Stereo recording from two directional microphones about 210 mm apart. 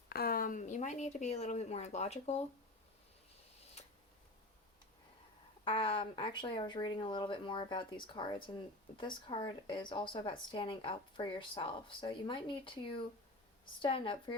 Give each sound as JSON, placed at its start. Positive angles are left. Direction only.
{"t": 0.1, "sound": "speech", "side_deg": 45}
{"t": 3.8, "sound": "a sound", "side_deg": 30}
{"t": 5.6, "sound": "speech", "side_deg": 25}